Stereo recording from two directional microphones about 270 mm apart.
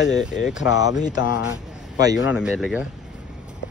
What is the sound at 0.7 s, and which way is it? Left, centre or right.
Speech, centre.